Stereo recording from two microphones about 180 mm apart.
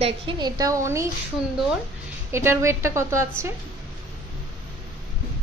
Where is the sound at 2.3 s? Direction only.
15° right (ahead or behind).